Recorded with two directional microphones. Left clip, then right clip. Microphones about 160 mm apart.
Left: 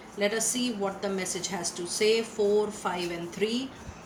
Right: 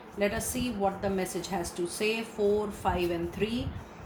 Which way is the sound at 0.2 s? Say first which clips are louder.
Left 2 dB; 40° right (ahead or behind).